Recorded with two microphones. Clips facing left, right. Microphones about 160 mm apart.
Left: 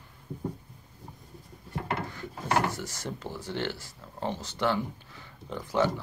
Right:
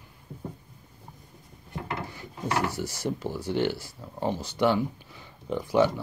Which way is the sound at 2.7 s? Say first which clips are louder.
Right 6 dB; 10° right (ahead or behind).